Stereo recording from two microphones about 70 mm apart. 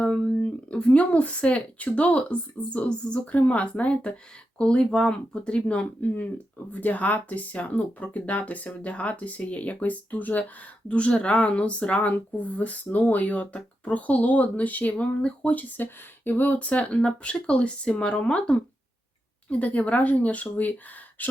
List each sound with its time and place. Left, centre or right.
0.0 s speech: centre